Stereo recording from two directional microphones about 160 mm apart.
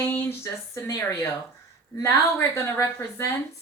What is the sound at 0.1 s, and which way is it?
A woman's voice, 15° left (ahead or behind).